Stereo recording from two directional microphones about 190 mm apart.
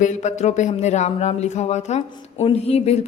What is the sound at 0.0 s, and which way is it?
A woman's voice, 40° left (ahead or behind).